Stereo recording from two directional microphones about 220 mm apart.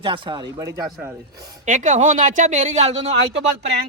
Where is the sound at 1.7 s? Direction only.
35° right (ahead or behind).